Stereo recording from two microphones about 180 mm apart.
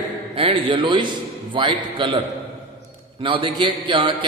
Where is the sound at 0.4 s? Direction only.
30° right (ahead or behind).